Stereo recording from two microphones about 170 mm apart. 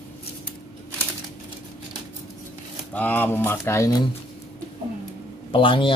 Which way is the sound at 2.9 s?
10° left (ahead or behind).